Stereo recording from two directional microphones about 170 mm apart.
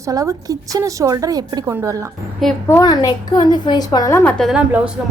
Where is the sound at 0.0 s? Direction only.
20° right (ahead or behind).